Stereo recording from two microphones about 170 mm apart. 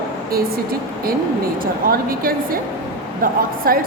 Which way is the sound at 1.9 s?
60° right (ahead or behind).